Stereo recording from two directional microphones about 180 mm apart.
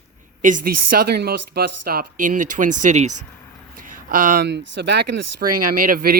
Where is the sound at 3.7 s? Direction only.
50° right (ahead or behind).